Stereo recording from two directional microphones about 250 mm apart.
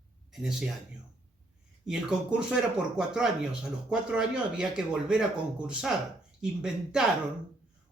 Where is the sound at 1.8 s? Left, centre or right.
Centre.